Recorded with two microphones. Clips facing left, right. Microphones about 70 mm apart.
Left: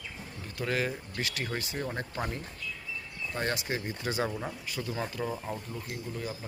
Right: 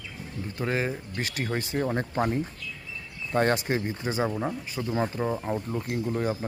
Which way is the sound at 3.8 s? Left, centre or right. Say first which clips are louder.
Right 4 dB; right.